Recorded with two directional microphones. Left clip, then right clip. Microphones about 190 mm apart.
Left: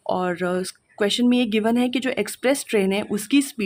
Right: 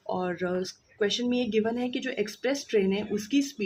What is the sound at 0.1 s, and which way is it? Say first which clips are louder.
Speech: left 7 dB; 35° left (ahead or behind).